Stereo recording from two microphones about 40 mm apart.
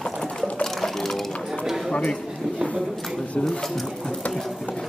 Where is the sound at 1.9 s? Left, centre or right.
Left.